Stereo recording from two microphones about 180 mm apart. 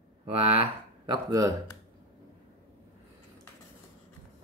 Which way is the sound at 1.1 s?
20° right (ahead or behind).